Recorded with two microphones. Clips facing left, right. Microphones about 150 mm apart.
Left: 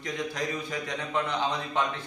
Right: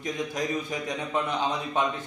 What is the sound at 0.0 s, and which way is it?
A man's voice, 15° right (ahead or behind).